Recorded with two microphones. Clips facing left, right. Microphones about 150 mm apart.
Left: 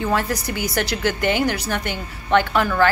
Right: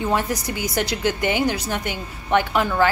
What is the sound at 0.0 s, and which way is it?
A woman's voice, 20° right (ahead or behind).